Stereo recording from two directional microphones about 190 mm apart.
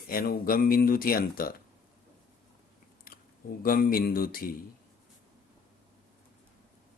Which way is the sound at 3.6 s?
50° left (ahead or behind).